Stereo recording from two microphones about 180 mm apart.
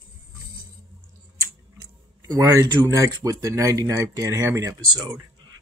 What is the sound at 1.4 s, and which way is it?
Speech, 20° right (ahead or behind).